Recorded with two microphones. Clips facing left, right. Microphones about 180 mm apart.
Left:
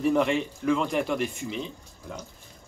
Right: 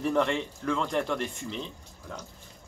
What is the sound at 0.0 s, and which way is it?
Speech, 5° left (ahead or behind).